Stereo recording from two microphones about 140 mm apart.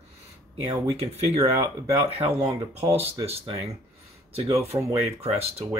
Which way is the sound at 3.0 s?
45° right (ahead or behind).